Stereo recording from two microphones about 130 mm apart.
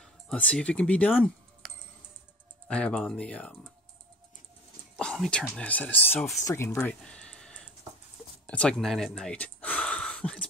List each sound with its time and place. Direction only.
0.0 s speech: 5° left (ahead or behind)
2.7 s speech: 10° left (ahead or behind)
4.9 s whispering: centre (ahead or behind)
5.6 s speech: 10° left (ahead or behind)
6.8 s a sound: 5° left (ahead or behind)
8.5 s speech: 5° left (ahead or behind)